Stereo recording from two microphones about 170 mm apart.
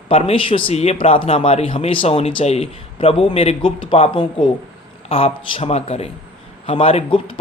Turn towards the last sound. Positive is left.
turn(degrees=30)  # may be behind; listen again after turning